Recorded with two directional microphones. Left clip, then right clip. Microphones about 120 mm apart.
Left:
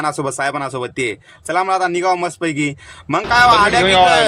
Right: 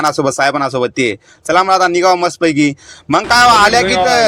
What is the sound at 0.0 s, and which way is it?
A man's voice, 35° right (ahead or behind).